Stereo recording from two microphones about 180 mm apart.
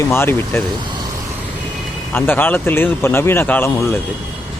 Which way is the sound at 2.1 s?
10° left (ahead or behind).